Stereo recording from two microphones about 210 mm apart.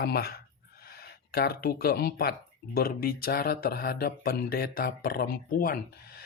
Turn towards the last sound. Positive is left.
turn(degrees=45)  # may be behind; listen again after turning